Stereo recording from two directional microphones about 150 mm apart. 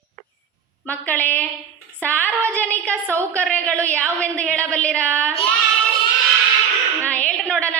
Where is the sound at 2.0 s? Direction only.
10° left (ahead or behind).